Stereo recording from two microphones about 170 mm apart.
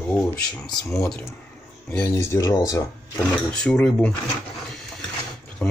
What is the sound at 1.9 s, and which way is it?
Speech, 15° left (ahead or behind).